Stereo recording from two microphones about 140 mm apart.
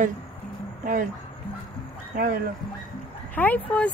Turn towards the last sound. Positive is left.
turn(degrees=10)  # may be behind; listen again after turning